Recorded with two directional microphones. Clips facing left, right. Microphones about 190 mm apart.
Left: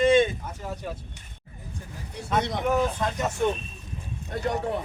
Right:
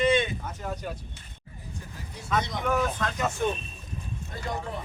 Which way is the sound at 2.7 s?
25° left (ahead or behind).